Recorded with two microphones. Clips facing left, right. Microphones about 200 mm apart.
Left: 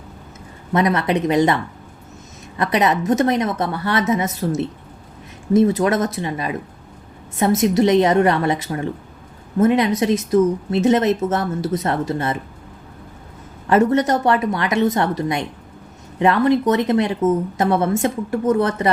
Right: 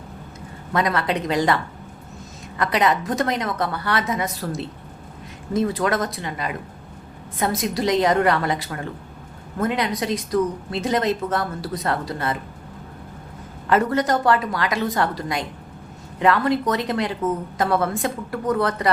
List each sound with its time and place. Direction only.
0.7 s a woman's voice: 25° left (ahead or behind)
2.6 s a woman's voice: 25° left (ahead or behind)
13.7 s a woman's voice: 25° left (ahead or behind)